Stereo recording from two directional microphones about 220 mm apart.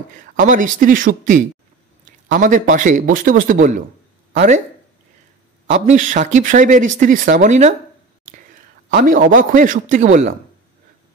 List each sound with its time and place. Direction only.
0.2 s speech: 35° right (ahead or behind)
5.7 s a man's voice: 35° right (ahead or behind)